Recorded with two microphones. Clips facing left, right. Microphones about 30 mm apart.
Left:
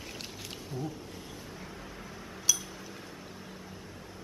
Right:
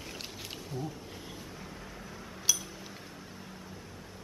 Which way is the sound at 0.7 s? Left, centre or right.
Centre.